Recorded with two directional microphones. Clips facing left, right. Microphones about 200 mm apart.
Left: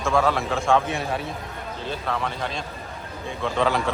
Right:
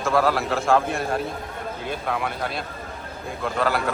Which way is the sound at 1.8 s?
10° right (ahead or behind).